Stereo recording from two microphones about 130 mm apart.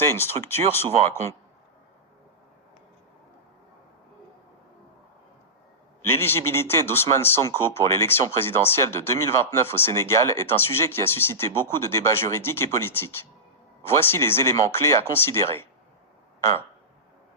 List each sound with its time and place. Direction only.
0.2 s speech: 15° left (ahead or behind)
6.1 s speech: 20° left (ahead or behind)